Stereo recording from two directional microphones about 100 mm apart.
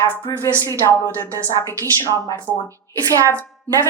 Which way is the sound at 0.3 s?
30° left (ahead or behind).